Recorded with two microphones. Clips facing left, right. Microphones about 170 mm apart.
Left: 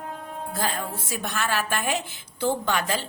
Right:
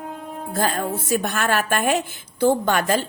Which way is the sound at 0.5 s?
50° right (ahead or behind).